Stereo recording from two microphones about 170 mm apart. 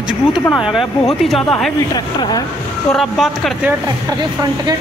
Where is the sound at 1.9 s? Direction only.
25° left (ahead or behind).